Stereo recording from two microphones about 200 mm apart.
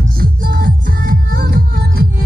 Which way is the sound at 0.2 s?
45° right (ahead or behind).